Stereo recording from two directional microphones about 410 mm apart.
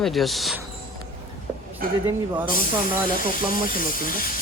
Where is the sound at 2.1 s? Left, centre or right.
Centre.